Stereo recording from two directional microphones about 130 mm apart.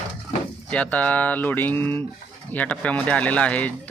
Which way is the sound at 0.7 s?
10° left (ahead or behind).